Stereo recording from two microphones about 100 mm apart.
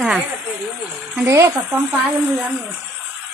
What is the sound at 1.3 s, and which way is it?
Speech, 30° right (ahead or behind).